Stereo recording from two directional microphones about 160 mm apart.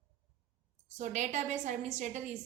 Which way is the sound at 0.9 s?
50° right (ahead or behind).